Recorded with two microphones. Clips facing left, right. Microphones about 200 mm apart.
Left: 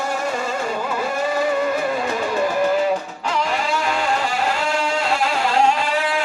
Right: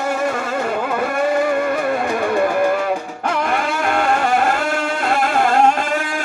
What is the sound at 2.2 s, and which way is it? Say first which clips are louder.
Music: right 5 dB; 55° right (ahead or behind).